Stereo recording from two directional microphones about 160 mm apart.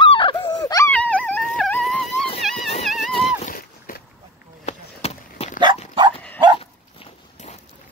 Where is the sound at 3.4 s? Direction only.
65° left (ahead or behind).